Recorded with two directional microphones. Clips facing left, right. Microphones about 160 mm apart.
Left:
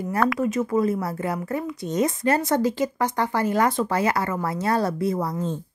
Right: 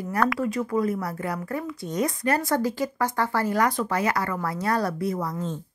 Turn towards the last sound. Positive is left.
turn(degrees=30)  # may be behind; listen again after turning